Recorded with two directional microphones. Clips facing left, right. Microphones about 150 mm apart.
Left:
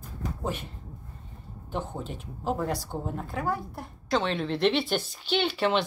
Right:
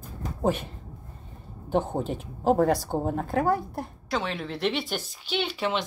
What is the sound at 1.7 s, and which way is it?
Speech, 50° right (ahead or behind).